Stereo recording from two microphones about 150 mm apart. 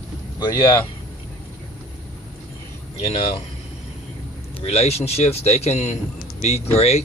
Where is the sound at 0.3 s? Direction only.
30° left (ahead or behind).